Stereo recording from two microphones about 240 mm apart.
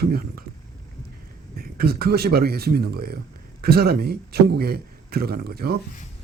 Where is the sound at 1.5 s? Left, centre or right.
Right.